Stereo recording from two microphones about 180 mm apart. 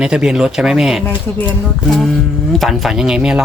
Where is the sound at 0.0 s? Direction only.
5° right (ahead or behind).